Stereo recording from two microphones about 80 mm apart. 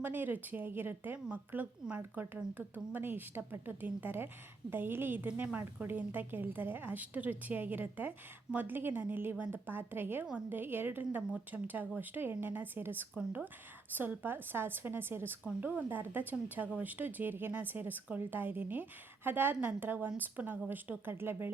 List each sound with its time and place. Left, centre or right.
0.0 s speech: right